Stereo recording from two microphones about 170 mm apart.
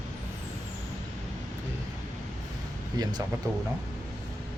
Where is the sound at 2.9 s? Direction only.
25° right (ahead or behind).